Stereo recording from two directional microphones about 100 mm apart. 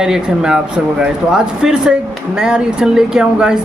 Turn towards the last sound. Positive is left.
turn(degrees=-10)  # may be behind; listen again after turning